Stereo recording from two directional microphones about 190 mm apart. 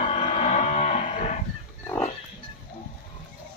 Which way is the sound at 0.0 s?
35° left (ahead or behind).